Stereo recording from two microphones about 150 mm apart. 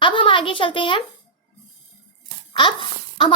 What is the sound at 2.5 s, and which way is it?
Speech, 35° left (ahead or behind).